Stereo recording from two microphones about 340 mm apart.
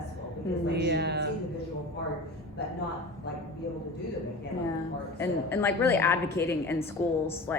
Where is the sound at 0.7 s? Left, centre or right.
Right.